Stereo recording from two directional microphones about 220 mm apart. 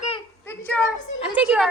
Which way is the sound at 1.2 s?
5° right (ahead or behind).